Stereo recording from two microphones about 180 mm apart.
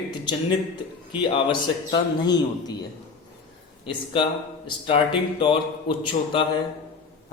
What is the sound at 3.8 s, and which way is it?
A man's voice, 30° left (ahead or behind).